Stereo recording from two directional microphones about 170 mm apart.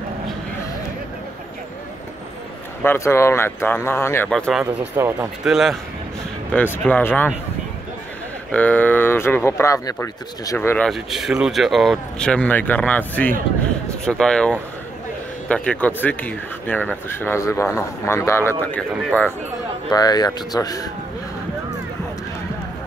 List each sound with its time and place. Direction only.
2.8 s speech: 15° left (ahead or behind)
4.3 s speech: centre (ahead or behind)
4.9 s speech: 15° right (ahead or behind)
5.4 s speech: 5° right (ahead or behind)
6.5 s speech: 10° left (ahead or behind)
8.5 s speech: 10° left (ahead or behind)
10.9 s speech: centre (ahead or behind)
19.9 s speech: 25° left (ahead or behind)